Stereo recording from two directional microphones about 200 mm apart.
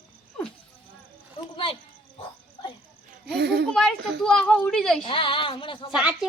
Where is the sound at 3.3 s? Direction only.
55° right (ahead or behind).